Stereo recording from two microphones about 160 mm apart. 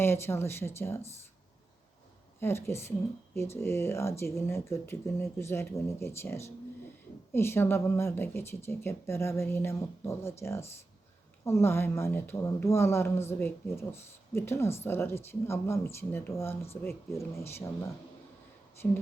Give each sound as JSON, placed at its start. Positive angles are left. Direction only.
{"t": 0.0, "sound": "speech", "side_deg": 15}
{"t": 2.4, "sound": "speech", "side_deg": 15}